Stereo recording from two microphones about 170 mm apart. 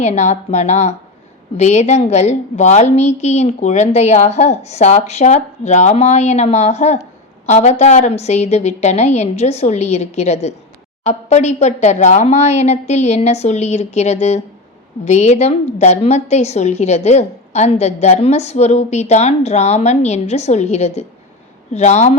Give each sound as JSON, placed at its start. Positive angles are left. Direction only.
{"t": 0.0, "sound": "a woman's voice", "side_deg": 40}